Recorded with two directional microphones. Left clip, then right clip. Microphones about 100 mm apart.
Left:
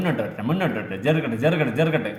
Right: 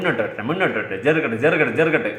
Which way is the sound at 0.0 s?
15° left (ahead or behind).